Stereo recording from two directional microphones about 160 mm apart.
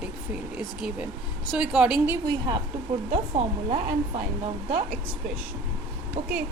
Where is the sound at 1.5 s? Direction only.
5° right (ahead or behind).